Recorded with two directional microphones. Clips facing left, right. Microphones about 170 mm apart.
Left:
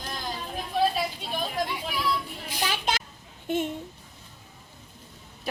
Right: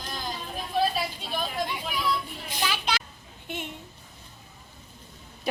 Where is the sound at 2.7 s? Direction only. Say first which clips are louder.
Left 1 dB; 45° left (ahead or behind).